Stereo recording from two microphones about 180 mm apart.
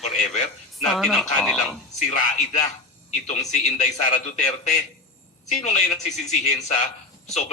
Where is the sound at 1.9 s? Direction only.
40° left (ahead or behind).